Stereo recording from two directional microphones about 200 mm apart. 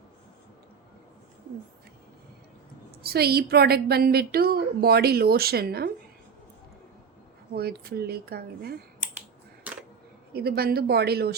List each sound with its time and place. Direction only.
3.0 s a woman's voice: 50° right (ahead or behind)
7.5 s a woman's voice: 50° right (ahead or behind)
10.3 s a woman's voice: 50° right (ahead or behind)